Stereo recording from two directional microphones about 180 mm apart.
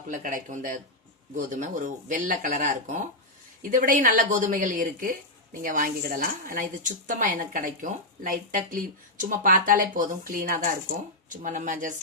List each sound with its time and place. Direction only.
0.2 s a woman's voice: 45° right (ahead or behind)